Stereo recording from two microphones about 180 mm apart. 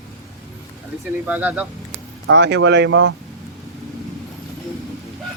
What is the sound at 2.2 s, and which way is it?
Speech, 70° right (ahead or behind).